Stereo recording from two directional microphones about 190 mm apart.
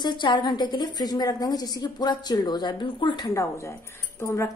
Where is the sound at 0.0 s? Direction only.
25° left (ahead or behind).